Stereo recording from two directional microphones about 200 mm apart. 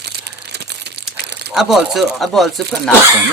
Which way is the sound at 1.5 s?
Centre (ahead or behind).